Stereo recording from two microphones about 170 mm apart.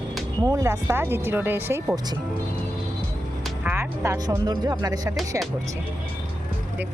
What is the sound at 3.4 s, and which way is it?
Speech, 10° right (ahead or behind).